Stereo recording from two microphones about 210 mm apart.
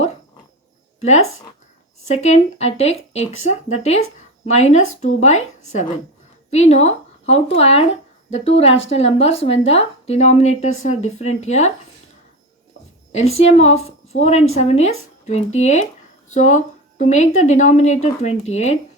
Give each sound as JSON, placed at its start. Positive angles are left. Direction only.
{"t": 1.0, "sound": "a woman's voice", "side_deg": 35}
{"t": 13.1, "sound": "speech", "side_deg": 30}